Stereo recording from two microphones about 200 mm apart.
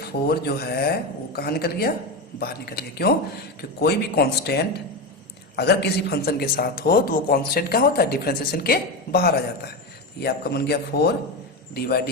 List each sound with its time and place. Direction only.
0.0 s speech: 55° left (ahead or behind)